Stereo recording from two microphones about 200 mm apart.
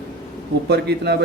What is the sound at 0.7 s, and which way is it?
Speech, 55° right (ahead or behind).